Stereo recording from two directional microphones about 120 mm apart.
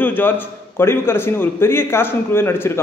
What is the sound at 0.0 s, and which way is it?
A man's voice, 15° left (ahead or behind).